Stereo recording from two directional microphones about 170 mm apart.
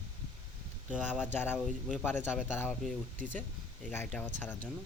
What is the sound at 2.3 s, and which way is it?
Speech, 5° right (ahead or behind).